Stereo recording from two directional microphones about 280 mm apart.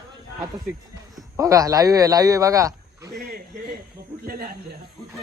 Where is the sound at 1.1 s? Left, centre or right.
Centre.